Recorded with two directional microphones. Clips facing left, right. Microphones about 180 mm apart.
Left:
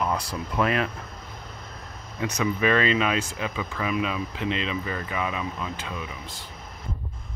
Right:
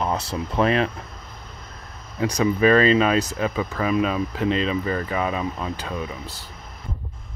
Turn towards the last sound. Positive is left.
turn(degrees=-40)  # may be behind; listen again after turning